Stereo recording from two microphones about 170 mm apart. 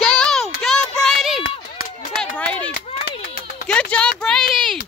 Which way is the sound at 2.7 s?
60° left (ahead or behind).